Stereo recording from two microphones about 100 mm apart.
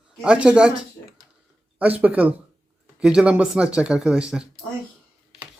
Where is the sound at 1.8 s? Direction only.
15° right (ahead or behind).